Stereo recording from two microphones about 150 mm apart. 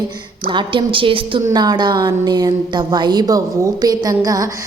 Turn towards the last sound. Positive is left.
turn(degrees=-25)  # may be behind; listen again after turning